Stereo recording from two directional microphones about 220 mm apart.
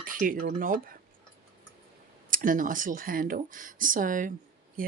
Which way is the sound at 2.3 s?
40° right (ahead or behind).